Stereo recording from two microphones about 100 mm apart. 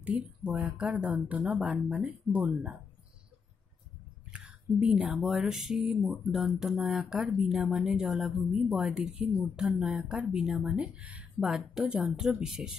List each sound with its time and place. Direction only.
0.0 s speech: 10° right (ahead or behind)
4.3 s speech: 10° right (ahead or behind)
8.4 s speech: 15° right (ahead or behind)